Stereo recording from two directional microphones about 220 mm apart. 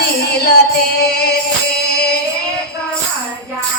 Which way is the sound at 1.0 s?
45° left (ahead or behind).